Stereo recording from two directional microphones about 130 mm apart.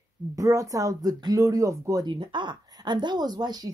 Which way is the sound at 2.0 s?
35° right (ahead or behind).